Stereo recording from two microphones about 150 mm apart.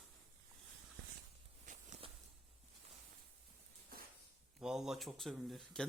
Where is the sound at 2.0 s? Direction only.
35° right (ahead or behind).